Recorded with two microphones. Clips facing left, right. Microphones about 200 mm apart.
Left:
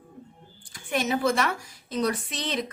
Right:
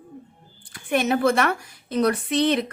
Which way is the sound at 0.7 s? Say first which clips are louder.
Right 5 dB; 60° right (ahead or behind).